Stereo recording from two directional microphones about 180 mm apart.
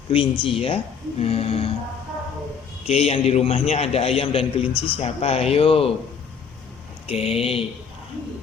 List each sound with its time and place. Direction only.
0.1 s a man's voice: 30° left (ahead or behind)
2.8 s a man's voice: 35° left (ahead or behind)
7.1 s a man's voice: 35° left (ahead or behind)